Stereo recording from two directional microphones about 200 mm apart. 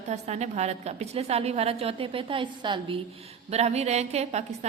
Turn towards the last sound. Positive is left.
turn(degrees=-35)  # may be behind; listen again after turning